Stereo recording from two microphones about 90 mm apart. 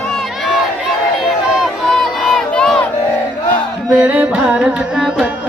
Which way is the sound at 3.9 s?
15° right (ahead or behind).